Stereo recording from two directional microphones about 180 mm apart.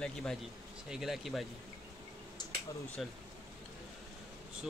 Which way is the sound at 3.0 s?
Centre (ahead or behind).